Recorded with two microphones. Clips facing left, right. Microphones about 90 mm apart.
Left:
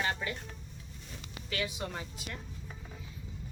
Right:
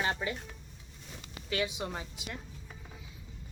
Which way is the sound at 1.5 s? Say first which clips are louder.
Right 3 dB; 20° right (ahead or behind).